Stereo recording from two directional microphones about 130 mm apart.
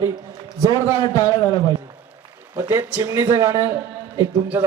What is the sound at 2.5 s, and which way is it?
Speech, 20° right (ahead or behind).